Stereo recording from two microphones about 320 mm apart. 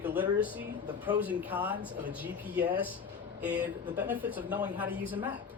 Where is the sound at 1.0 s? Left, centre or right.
Centre.